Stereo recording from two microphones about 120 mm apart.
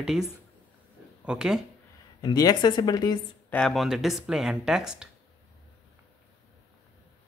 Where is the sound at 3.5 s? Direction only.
5° left (ahead or behind).